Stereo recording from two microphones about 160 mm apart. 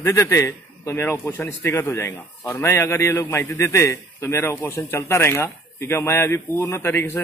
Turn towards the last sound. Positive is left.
turn(degrees=15)  # may be behind; listen again after turning